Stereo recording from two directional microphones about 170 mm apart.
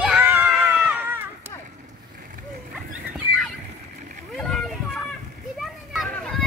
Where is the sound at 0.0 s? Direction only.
5° right (ahead or behind).